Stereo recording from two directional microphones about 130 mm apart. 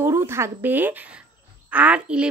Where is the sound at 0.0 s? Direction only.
20° right (ahead or behind).